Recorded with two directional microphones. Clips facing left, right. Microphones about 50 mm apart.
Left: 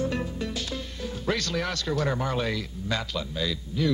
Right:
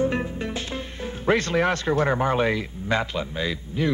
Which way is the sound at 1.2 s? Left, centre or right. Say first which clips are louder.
Right 8 dB; right.